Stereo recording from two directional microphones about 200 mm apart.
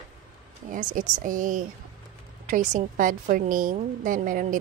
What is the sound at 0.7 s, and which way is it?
A woman's voice, 40° right (ahead or behind).